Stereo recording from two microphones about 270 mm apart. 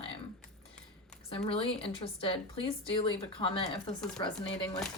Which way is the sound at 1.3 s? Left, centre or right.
Centre.